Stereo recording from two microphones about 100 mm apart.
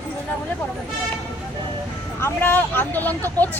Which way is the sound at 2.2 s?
20° left (ahead or behind).